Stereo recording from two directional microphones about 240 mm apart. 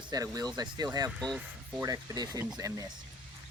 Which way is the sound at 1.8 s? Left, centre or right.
Centre.